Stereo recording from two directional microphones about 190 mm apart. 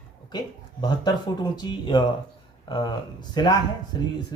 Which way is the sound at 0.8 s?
20° left (ahead or behind).